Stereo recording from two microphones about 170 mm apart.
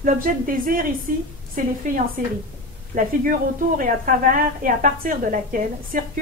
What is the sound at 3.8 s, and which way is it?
A woman's voice, 50° right (ahead or behind).